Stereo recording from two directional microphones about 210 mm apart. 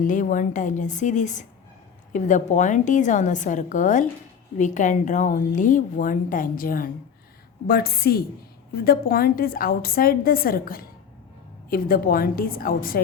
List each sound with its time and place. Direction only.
0.0 s a woman's voice: 40° left (ahead or behind)